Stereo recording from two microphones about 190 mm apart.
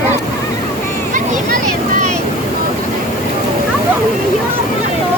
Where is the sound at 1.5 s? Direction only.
45° right (ahead or behind).